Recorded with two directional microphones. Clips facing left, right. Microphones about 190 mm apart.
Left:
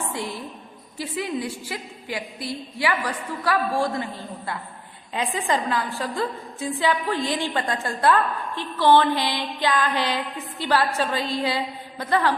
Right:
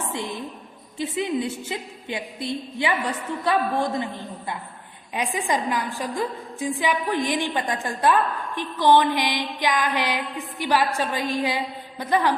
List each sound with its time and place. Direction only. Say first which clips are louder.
0.1 s a woman's voice: right 1 dB; 20° right (ahead or behind)